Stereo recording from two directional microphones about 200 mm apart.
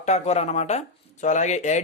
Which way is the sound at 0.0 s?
35° left (ahead or behind).